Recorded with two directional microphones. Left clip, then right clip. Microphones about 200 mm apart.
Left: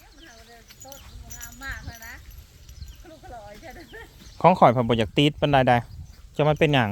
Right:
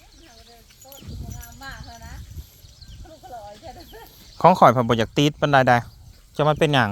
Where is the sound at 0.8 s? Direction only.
5° left (ahead or behind).